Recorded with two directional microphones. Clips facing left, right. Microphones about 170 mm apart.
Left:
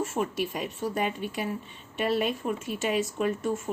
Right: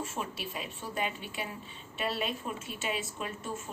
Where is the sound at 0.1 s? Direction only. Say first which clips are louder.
Left 9 dB; 45° left (ahead or behind).